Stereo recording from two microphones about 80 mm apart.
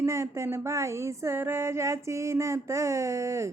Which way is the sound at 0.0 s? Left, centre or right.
Right.